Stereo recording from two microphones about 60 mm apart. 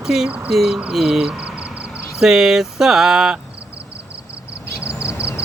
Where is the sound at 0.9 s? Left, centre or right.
Centre.